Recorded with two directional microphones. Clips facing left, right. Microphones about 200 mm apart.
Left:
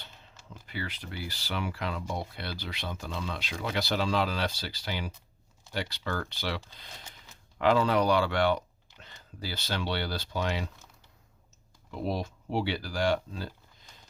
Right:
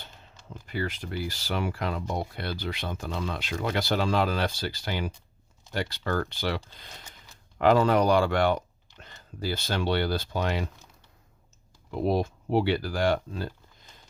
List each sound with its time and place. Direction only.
0.5 s speech: 45° right (ahead or behind)
12.0 s speech: 50° right (ahead or behind)